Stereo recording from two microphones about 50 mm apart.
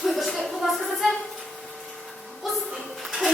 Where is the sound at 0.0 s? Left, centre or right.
Centre.